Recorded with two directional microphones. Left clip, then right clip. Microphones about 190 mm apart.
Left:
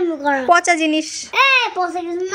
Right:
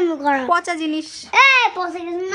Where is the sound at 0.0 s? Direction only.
20° right (ahead or behind).